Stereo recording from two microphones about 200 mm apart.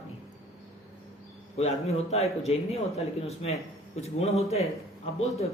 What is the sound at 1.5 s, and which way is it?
Speech, 30° left (ahead or behind).